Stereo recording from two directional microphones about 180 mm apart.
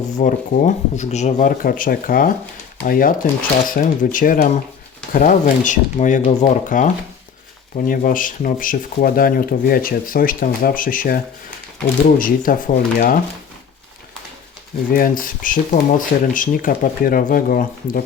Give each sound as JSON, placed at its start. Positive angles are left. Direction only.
{"t": 0.2, "sound": "speech", "side_deg": 45}
{"t": 14.9, "sound": "speech", "side_deg": 50}